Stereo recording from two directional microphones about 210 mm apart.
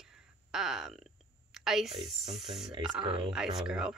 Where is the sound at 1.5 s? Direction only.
Centre (ahead or behind).